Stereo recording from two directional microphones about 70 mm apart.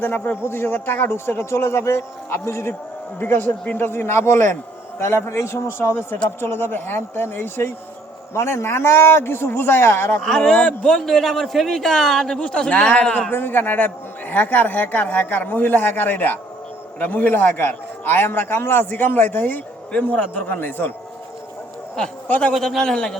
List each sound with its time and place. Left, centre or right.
0.0 s a man's voice: left
10.2 s a man's voice: centre
13.3 s a man's voice: left
19.9 s a man's voice: centre
22.3 s a man's voice: centre
22.5 s a man's voice: centre